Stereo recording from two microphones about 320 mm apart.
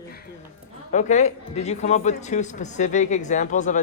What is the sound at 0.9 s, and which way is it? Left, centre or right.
Speech, left.